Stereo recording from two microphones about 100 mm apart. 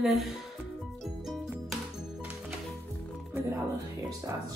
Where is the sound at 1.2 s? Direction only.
Centre (ahead or behind).